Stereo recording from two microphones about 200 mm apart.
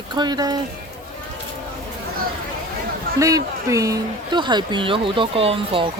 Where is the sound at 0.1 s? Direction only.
20° right (ahead or behind).